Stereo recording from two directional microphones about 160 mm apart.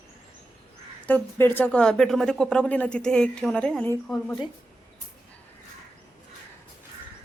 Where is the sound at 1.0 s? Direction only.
10° left (ahead or behind).